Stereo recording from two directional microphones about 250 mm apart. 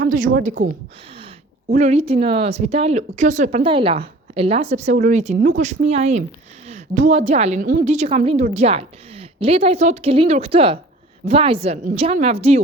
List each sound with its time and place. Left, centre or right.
0.0 s speech: right
1.7 s speech: right